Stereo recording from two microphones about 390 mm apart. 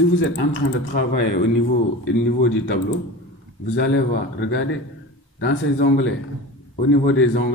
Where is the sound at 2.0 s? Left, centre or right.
Left.